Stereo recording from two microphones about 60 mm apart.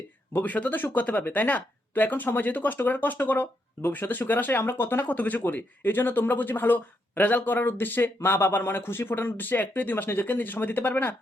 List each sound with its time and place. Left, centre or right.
0.4 s speech: left